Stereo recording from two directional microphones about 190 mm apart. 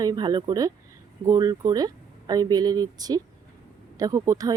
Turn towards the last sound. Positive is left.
turn(degrees=-15)  # may be behind; listen again after turning